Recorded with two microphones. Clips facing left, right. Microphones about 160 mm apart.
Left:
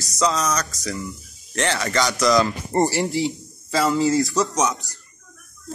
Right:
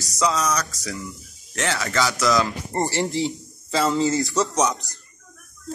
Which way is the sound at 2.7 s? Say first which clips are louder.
Left 4 dB; 15° left (ahead or behind).